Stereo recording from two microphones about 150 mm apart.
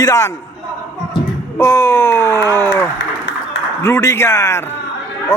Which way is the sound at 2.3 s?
25° right (ahead or behind).